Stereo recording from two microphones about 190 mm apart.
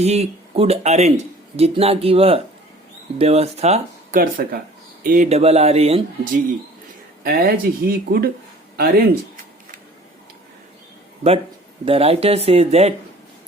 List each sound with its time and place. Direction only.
0.0 s speech: 35° right (ahead or behind)
4.2 s speech: 50° right (ahead or behind); by 6.4 s 35° right (ahead or behind)
7.3 s speech: 50° right (ahead or behind)
11.9 s speech: 30° right (ahead or behind)